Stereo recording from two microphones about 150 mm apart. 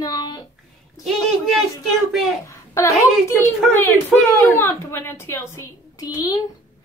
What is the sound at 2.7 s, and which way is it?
Speech, 20° left (ahead or behind).